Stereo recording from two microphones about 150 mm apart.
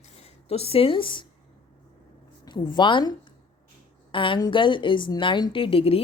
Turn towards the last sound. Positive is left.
turn(degrees=40)  # may be behind; listen again after turning